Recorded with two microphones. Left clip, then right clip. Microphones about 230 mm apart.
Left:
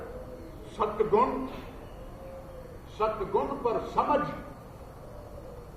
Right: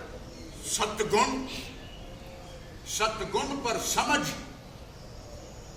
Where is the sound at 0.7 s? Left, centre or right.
Centre.